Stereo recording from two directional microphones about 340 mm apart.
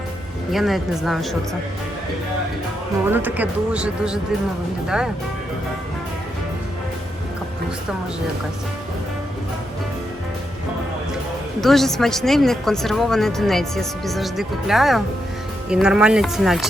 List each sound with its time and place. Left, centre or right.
0.5 s a woman's voice: centre
3.1 s a woman's voice: centre
11.6 s a woman's voice: centre